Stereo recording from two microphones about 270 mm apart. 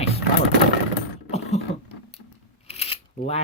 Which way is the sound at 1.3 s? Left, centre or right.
Left.